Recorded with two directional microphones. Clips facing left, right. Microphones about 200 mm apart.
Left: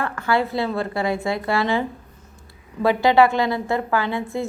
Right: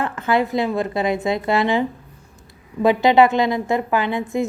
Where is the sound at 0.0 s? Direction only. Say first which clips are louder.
Right 2 dB; 20° right (ahead or behind).